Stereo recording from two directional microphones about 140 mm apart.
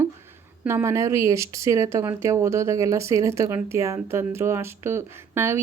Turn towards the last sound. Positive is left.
turn(degrees=-20)  # may be behind; listen again after turning